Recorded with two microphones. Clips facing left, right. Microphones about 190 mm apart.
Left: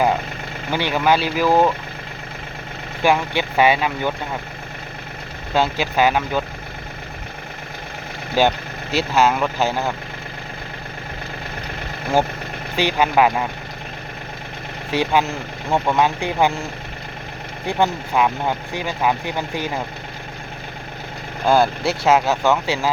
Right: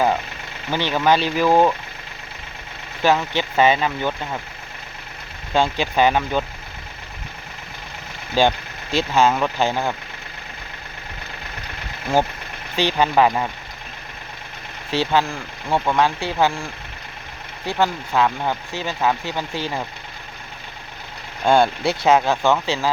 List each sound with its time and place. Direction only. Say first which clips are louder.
0.7 s speech: even; 10° left (ahead or behind)
3.0 s speech: left 1 dB; 10° left (ahead or behind)
5.5 s speech: even; 5° left (ahead or behind)
8.4 s speech: even; 10° left (ahead or behind)
12.7 s speech: even; 10° left (ahead or behind)
14.9 s speech: left 1 dB; 15° left (ahead or behind)
17.7 s speech: left 1 dB; 15° left (ahead or behind)
21.4 s speech: even; 5° left (ahead or behind)